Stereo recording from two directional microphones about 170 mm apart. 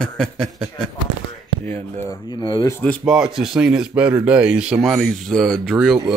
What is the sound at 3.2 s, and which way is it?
Speech, 5° right (ahead or behind).